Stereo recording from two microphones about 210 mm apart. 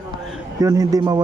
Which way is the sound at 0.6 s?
15° right (ahead or behind).